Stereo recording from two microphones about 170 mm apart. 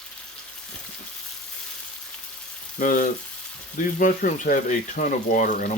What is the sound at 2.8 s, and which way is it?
Speech, 50° left (ahead or behind).